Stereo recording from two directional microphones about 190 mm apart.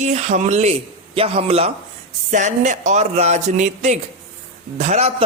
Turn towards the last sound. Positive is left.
turn(degrees=-35)  # may be behind; listen again after turning